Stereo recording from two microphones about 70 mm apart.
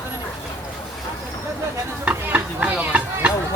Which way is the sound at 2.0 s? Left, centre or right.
Right.